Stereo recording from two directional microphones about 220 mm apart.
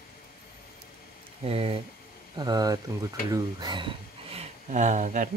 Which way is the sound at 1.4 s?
25° right (ahead or behind).